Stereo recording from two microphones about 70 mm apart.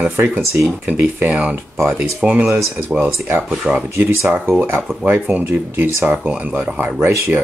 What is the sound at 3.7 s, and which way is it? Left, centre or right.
Speech, centre.